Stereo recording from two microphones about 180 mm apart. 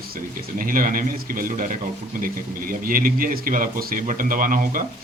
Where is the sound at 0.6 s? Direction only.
50° right (ahead or behind).